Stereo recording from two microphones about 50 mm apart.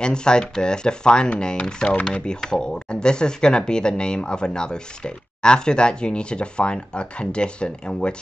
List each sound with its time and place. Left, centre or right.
0.0 s speech: centre